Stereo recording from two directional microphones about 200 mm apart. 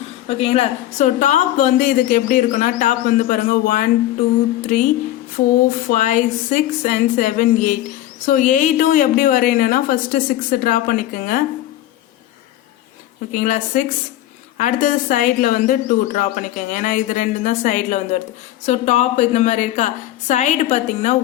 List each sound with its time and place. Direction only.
0.3 s a woman's voice: 30° left (ahead or behind)
5.9 s a woman's voice: 40° left (ahead or behind)
13.3 s a woman's voice: 40° left (ahead or behind)